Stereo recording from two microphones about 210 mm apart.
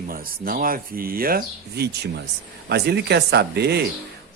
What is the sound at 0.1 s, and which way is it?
Speech, 45° right (ahead or behind).